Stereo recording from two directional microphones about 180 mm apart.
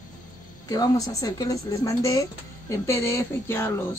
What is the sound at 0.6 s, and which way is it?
Speech, 20° left (ahead or behind).